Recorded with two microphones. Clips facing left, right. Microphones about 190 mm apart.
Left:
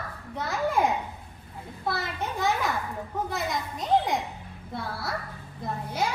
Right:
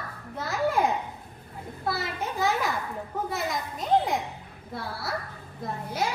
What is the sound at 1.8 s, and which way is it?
A child's voice, centre (ahead or behind).